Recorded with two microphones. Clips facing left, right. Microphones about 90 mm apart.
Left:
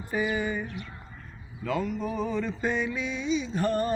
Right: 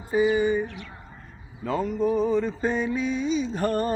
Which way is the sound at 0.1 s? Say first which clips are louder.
Right 7 dB; 20° right (ahead or behind).